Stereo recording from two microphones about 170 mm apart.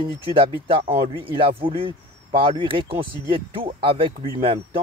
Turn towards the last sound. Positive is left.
turn(degrees=-30)  # may be behind; listen again after turning